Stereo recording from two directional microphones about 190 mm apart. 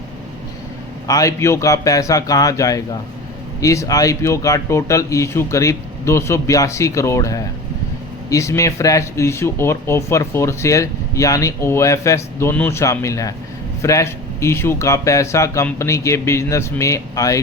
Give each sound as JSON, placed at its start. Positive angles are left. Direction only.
{"t": 1.0, "sound": "speech", "side_deg": 20}